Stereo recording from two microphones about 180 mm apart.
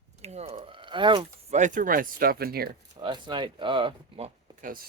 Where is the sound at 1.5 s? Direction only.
40° right (ahead or behind); by 2.7 s 60° right (ahead or behind).